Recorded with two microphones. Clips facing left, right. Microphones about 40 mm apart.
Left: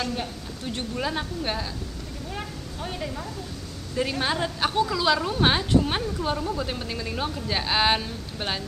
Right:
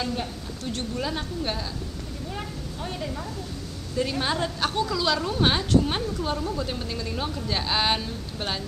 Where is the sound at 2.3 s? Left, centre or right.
Centre.